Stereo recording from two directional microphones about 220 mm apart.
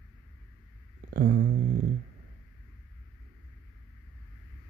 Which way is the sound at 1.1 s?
40° right (ahead or behind).